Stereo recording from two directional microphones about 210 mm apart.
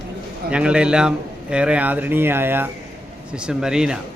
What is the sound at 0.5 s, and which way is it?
A man's voice, 5° right (ahead or behind).